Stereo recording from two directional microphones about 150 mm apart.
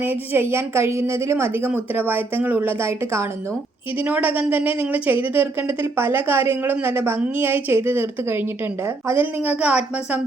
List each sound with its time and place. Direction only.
0.0 s speech: 15° right (ahead or behind)